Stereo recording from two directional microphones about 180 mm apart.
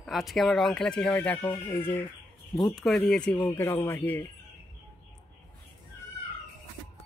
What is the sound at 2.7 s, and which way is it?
Speech, centre (ahead or behind).